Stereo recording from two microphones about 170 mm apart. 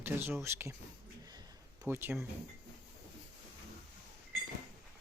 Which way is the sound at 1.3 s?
25° right (ahead or behind).